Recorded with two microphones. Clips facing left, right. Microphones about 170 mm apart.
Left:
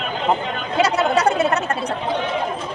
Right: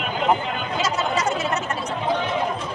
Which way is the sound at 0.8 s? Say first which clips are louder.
Left 6 dB; 65° left (ahead or behind).